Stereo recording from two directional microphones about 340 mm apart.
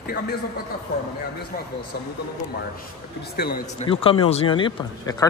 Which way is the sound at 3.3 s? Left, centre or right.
Left.